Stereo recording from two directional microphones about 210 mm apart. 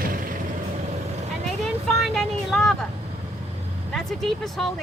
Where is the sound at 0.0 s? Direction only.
40° right (ahead or behind).